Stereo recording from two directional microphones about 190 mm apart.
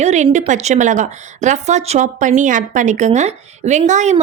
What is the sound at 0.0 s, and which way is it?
A woman's voice, 35° right (ahead or behind).